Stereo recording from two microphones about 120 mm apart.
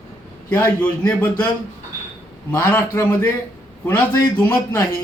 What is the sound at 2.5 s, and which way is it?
Speech, 15° left (ahead or behind).